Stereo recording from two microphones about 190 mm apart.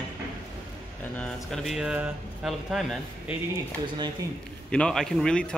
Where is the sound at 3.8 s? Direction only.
25° right (ahead or behind).